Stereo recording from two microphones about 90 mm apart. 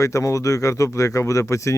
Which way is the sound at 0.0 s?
35° left (ahead or behind).